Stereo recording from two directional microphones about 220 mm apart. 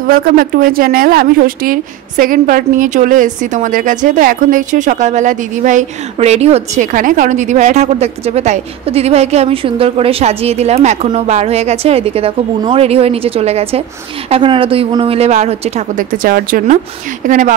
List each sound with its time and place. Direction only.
0.1 s a woman's voice: 40° right (ahead or behind)